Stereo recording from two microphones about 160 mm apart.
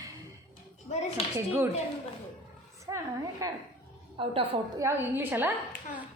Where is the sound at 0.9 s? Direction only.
45° left (ahead or behind).